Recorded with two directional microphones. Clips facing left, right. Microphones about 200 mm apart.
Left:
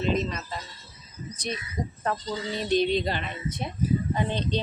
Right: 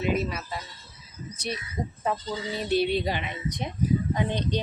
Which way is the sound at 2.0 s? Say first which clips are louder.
Even; 5° right (ahead or behind).